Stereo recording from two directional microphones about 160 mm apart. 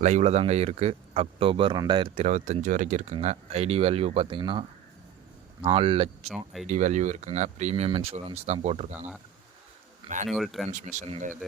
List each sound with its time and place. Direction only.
0.0 s speech: 45° right (ahead or behind)
5.6 s speech: 35° right (ahead or behind)
6.3 s speech: centre (ahead or behind)
6.7 s speech: 50° right (ahead or behind)
10.2 s speech: centre (ahead or behind)
10.7 s speech: 50° right (ahead or behind)